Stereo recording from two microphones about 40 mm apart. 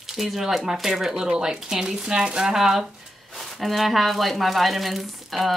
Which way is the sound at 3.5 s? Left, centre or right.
Centre.